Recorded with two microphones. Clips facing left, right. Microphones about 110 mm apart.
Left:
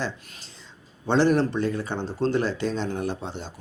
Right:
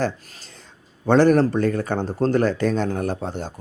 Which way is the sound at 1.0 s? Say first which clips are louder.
Right 5 dB; 50° right (ahead or behind).